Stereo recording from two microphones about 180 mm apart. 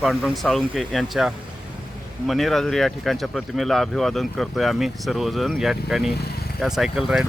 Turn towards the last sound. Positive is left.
turn(degrees=0)  # may be behind; listen again after turning